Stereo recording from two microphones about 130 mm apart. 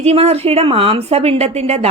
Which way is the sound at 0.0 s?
50° right (ahead or behind).